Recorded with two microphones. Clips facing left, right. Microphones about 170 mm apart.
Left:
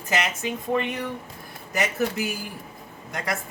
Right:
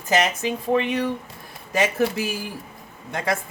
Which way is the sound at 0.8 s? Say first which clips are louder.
Right 4 dB; 90° right.